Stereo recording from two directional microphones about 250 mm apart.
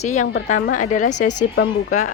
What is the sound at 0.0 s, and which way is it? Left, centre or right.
A woman's voice, left.